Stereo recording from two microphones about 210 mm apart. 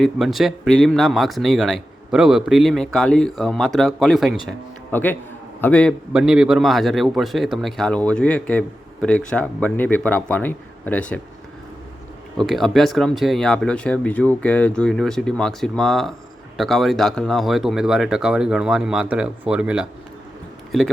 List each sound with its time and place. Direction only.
0.0 s a man's voice: centre (ahead or behind)
12.4 s a man's voice: centre (ahead or behind)